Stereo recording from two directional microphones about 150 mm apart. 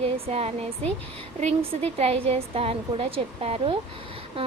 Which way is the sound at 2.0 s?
40° right (ahead or behind).